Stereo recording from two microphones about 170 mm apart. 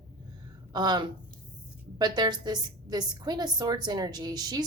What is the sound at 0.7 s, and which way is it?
A woman's voice, 25° right (ahead or behind).